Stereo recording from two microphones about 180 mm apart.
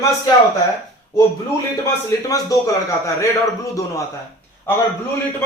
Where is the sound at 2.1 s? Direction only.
20° left (ahead or behind).